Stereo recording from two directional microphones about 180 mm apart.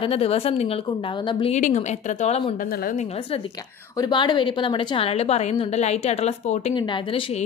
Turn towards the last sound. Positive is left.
turn(degrees=30)  # may be behind; listen again after turning